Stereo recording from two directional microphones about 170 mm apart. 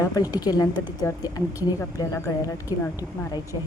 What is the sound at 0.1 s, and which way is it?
A woman's voice, 20° left (ahead or behind).